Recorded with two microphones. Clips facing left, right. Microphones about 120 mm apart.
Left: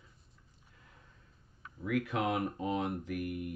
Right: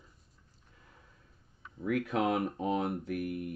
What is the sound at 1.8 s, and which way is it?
Speech, 40° right (ahead or behind).